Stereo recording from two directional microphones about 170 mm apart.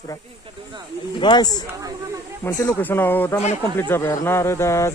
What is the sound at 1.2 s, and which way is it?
Speech, 25° left (ahead or behind).